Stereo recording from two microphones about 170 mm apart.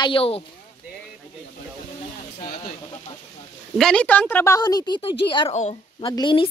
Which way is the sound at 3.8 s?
5° left (ahead or behind).